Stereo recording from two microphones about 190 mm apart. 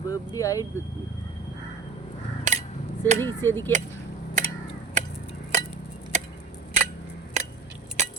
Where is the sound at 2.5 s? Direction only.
40° right (ahead or behind).